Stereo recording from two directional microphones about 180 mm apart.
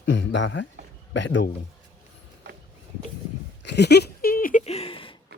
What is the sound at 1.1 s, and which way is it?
Speech, 90° left.